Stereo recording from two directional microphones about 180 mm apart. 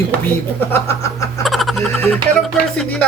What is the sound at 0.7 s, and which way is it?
Snicker, 15° left (ahead or behind).